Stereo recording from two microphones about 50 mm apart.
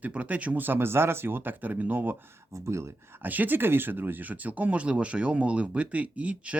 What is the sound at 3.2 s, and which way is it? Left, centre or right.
Speech, right.